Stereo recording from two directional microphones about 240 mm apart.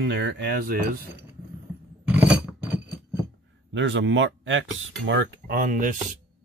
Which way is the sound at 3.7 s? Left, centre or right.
Right.